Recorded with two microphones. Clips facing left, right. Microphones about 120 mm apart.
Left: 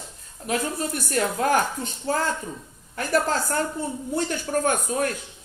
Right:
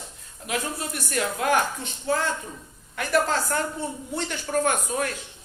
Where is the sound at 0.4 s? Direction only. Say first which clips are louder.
Left 3 dB; 40° left (ahead or behind).